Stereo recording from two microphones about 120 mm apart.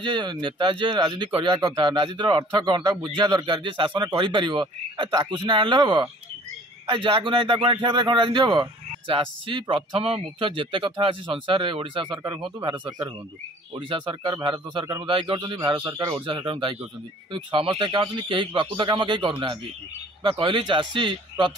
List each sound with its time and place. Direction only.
0.0 s speech: 40° right (ahead or behind)